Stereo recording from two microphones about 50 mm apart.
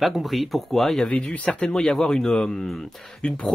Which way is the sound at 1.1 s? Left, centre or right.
Left.